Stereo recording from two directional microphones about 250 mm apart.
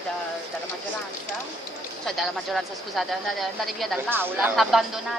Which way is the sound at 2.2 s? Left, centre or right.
Centre.